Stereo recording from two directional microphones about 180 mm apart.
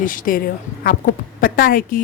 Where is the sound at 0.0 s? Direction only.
50° left (ahead or behind).